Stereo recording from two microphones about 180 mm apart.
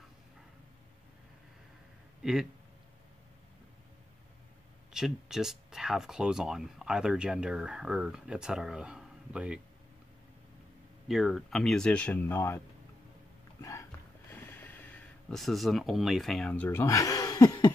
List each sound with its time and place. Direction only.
4.9 s speech: 5° right (ahead or behind)
11.1 s speech: centre (ahead or behind)
13.6 s music: 15° left (ahead or behind)
14.3 s speech: 10° left (ahead or behind)